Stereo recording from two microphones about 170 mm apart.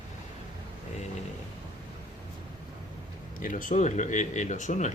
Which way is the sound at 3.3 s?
50° left (ahead or behind).